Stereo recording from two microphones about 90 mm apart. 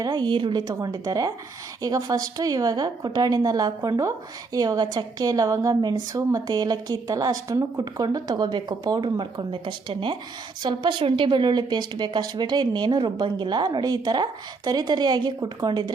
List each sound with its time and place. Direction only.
0.0 s a woman's voice: 50° right (ahead or behind)